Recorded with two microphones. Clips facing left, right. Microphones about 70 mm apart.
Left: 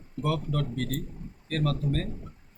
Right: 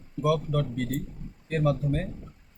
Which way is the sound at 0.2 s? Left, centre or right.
Centre.